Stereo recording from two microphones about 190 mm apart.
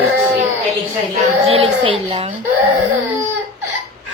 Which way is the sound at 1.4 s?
30° right (ahead or behind).